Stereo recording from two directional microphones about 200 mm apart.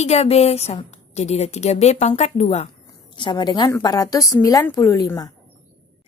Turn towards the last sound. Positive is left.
turn(degrees=15)  # may be behind; listen again after turning